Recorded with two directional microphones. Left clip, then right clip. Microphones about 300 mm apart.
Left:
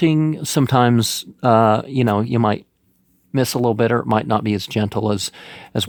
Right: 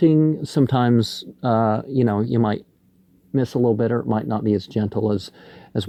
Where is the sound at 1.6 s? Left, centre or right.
Centre.